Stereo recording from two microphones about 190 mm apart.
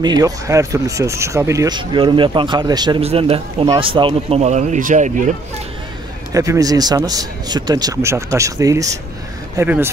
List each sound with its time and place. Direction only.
0.0 s speech: 20° right (ahead or behind); by 5.3 s 40° right (ahead or behind)
6.3 s speech: 15° right (ahead or behind)